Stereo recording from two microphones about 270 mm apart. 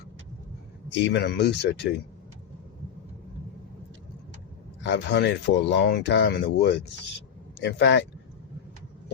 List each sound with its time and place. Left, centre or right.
1.0 s speech: left
4.8 s speech: left